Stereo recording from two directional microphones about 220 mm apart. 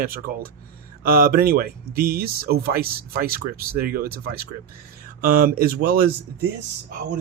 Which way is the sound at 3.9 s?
45° right (ahead or behind).